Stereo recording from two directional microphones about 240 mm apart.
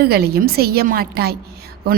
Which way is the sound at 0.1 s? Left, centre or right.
Right.